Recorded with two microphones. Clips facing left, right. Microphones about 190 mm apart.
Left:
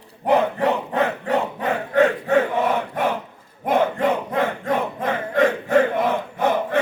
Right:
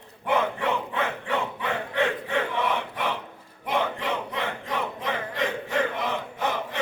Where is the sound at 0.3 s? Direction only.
40° left (ahead or behind).